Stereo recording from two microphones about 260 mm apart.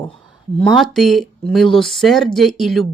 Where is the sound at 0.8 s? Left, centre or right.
Centre.